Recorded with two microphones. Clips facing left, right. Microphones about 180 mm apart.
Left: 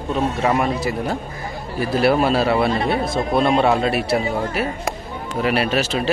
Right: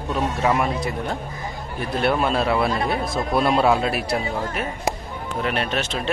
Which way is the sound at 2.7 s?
30° left (ahead or behind).